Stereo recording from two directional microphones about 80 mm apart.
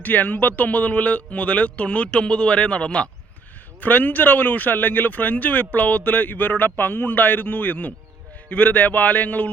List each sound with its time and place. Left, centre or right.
0.0 s speech: left